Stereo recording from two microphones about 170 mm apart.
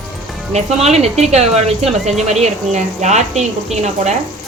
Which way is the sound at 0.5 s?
40° right (ahead or behind).